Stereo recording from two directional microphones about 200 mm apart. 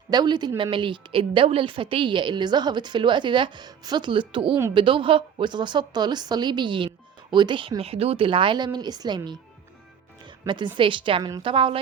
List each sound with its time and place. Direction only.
0.1 s a woman's voice: 20° right (ahead or behind)
10.2 s music: 25° right (ahead or behind)
10.8 s a woman's voice: 25° right (ahead or behind)